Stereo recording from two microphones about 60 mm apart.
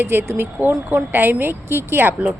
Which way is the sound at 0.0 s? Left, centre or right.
Right.